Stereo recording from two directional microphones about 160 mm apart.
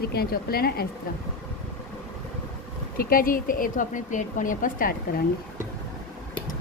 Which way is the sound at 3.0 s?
65° left (ahead or behind).